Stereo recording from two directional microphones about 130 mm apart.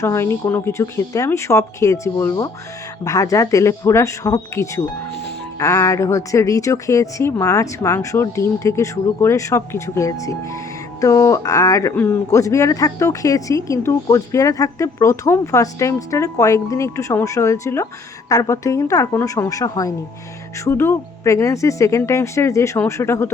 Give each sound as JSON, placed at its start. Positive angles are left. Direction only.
{"t": 0.0, "sound": "speech", "side_deg": 20}